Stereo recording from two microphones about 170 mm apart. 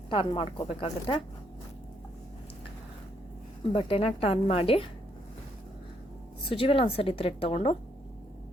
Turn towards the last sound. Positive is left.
turn(degrees=35)  # may be behind; listen again after turning